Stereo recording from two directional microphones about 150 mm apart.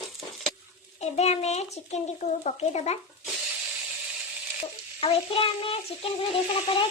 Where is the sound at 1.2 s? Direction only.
45° left (ahead or behind).